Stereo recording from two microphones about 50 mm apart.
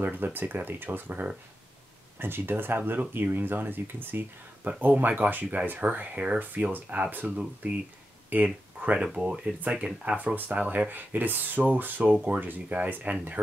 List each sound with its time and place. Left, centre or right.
0.0 s speech: right
4.6 s speech: right
7.2 s speech: centre
8.3 s speech: right
8.8 s speech: right